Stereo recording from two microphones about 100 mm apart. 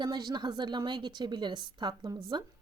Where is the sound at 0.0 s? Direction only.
45° right (ahead or behind).